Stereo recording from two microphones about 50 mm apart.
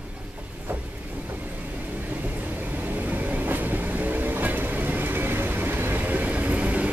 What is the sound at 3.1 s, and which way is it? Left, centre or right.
Train, right.